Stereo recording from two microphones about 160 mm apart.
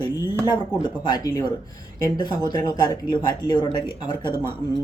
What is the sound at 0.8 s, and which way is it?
Speech, 25° left (ahead or behind).